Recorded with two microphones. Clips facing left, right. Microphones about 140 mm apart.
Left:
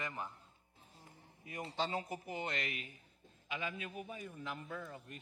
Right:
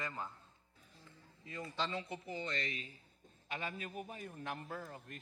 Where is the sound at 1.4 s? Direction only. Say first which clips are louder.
Left 1 dB; 20° left (ahead or behind).